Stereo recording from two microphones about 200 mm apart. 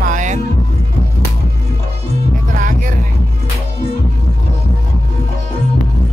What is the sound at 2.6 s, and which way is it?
Vehicle, 40° right (ahead or behind).